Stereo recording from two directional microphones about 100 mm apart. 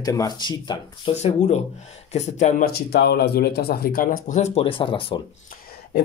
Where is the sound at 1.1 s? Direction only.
90° left.